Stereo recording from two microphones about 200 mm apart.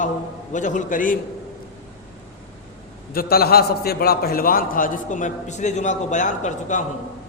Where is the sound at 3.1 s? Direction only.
50° left (ahead or behind).